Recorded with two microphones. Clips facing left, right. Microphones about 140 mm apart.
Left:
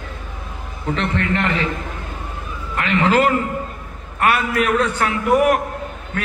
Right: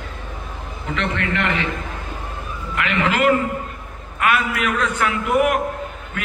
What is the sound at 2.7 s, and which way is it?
A man's voice, 35° left (ahead or behind).